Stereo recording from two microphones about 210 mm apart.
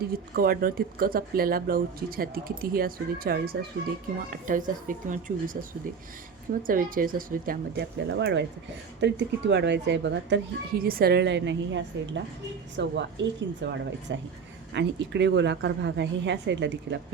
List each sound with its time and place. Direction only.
0.0 s speech: 45° right (ahead or behind)
6.6 s speech: 40° right (ahead or behind); by 17.0 s 55° right (ahead or behind)